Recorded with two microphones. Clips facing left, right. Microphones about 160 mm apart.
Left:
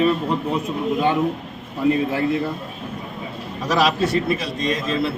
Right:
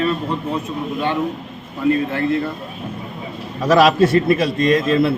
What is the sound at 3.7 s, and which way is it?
A man's voice, 55° right (ahead or behind).